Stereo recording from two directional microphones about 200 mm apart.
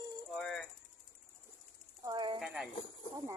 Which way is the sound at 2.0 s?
20° right (ahead or behind).